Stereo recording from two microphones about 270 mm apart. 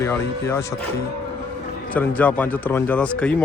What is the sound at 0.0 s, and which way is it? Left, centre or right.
Speech, centre.